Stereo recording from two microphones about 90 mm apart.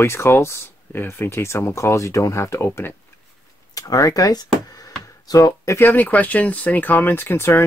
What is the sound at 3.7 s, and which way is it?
Speech, 40° left (ahead or behind).